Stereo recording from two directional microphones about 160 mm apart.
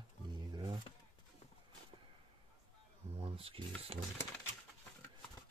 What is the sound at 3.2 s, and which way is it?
Speech, 35° right (ahead or behind).